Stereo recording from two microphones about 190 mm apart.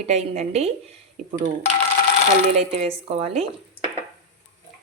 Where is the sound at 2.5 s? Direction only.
35° right (ahead or behind).